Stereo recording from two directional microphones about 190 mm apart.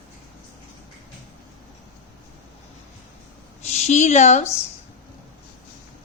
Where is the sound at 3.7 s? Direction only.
35° left (ahead or behind).